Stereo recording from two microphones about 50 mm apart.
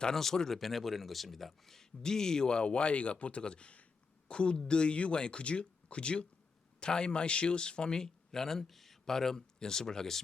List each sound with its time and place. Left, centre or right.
0.0 s a man's voice: centre